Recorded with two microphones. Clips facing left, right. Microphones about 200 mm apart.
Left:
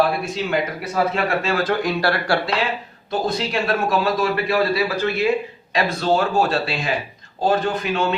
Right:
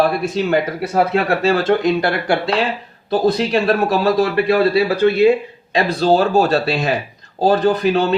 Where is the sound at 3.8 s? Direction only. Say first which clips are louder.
Right 4 dB; 35° right (ahead or behind).